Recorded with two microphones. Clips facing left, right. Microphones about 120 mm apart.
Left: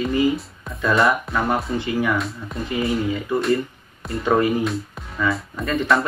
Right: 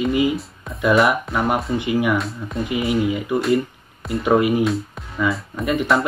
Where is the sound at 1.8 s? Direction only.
15° right (ahead or behind).